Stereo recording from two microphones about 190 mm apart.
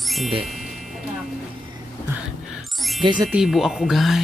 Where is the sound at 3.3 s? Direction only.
Centre (ahead or behind).